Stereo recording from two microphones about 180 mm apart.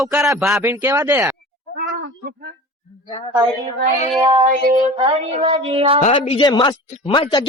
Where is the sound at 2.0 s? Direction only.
60° right (ahead or behind).